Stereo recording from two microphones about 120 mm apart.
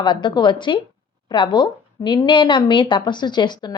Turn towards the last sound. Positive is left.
turn(degrees=35)  # may be behind; listen again after turning